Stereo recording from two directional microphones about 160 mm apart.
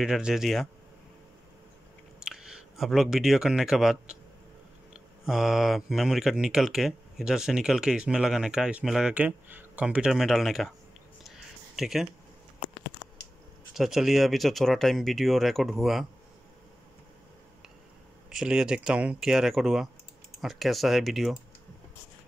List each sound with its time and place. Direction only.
0.0 s speech: 5° right (ahead or behind)
2.2 s speech: 5° right (ahead or behind)
11.2 s a sound: centre (ahead or behind)
13.7 s speech: centre (ahead or behind)
18.3 s speech: 5° right (ahead or behind)